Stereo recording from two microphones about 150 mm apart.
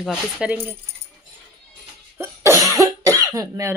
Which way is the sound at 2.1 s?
15° right (ahead or behind).